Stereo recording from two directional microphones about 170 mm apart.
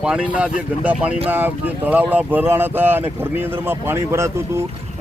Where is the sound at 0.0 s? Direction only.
5° right (ahead or behind).